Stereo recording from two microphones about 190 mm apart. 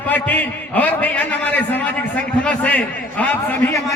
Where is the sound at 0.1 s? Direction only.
10° left (ahead or behind).